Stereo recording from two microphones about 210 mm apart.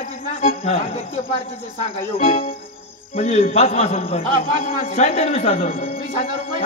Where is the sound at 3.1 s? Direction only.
35° left (ahead or behind).